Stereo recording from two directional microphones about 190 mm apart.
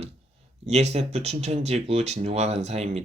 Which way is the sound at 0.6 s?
35° right (ahead or behind).